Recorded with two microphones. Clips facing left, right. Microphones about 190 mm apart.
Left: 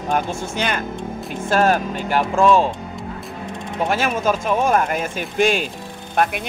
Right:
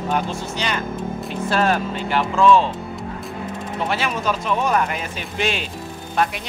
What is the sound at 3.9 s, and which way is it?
Speech, 45° left (ahead or behind).